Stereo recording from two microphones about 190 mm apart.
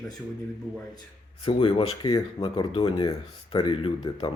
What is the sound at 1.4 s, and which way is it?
Speech, 25° left (ahead or behind).